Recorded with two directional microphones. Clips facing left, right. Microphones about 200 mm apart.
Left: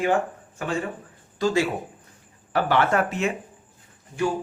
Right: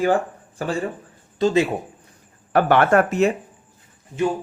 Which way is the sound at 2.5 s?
55° right (ahead or behind).